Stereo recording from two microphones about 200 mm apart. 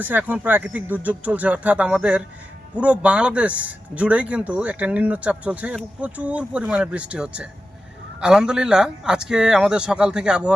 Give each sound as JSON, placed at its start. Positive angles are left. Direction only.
{"t": 0.0, "sound": "speech", "side_deg": -10}